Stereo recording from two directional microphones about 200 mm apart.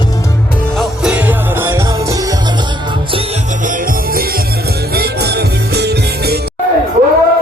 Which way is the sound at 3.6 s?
40° right (ahead or behind).